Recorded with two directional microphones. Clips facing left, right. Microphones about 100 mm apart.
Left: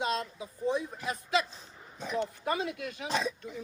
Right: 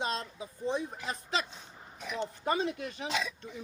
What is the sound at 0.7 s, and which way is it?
Speech, 25° right (ahead or behind).